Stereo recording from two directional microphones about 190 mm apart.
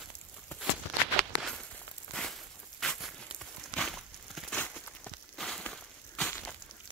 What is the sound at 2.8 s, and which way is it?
Crumpling, 5° left (ahead or behind).